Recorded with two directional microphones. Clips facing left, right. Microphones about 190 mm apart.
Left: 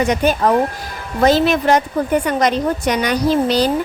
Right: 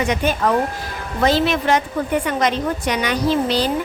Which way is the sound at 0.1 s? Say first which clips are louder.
Left 3 dB; 40° left (ahead or behind).